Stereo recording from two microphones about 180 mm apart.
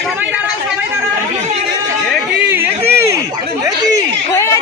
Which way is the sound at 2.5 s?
10° right (ahead or behind).